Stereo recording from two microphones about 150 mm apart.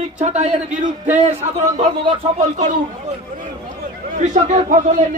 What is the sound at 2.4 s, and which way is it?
Speech, 55° right (ahead or behind).